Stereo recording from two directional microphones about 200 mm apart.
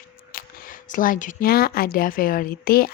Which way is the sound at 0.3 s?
45° left (ahead or behind).